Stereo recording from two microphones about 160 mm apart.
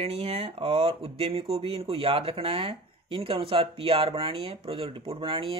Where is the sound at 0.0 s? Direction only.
40° right (ahead or behind).